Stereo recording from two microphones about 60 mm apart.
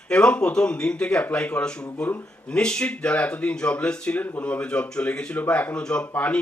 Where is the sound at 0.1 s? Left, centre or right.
Centre.